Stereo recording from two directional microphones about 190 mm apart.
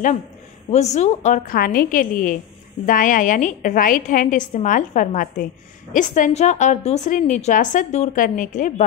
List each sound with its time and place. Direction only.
0.7 s a woman's voice: 35° left (ahead or behind)